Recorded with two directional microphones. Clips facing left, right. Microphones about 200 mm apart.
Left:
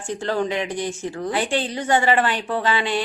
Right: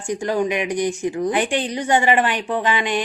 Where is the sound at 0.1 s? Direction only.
15° right (ahead or behind).